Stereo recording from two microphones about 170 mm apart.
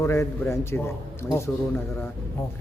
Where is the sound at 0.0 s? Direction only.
15° left (ahead or behind).